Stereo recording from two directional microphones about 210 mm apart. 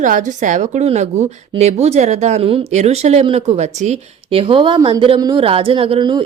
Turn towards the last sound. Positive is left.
turn(degrees=-20)  # may be behind; listen again after turning